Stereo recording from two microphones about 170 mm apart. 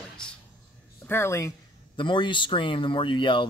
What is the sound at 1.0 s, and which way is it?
Speech, 15° left (ahead or behind).